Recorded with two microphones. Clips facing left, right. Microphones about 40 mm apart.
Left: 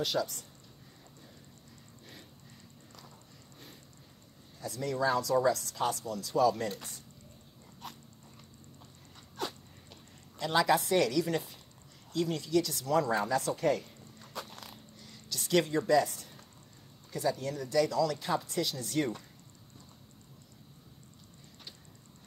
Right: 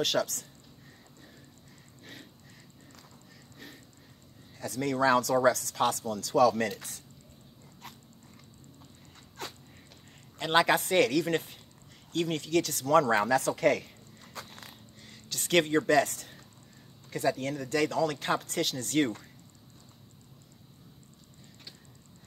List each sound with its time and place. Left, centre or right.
0.0 s speech: right
4.6 s speech: right
10.4 s speech: right
15.0 s speech: right
17.1 s speech: right